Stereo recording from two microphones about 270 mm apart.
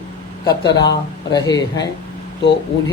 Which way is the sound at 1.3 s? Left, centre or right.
Centre.